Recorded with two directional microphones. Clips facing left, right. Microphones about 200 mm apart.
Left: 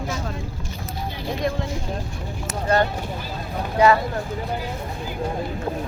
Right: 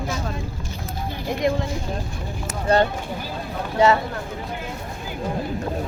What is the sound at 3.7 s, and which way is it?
Speech, 25° right (ahead or behind).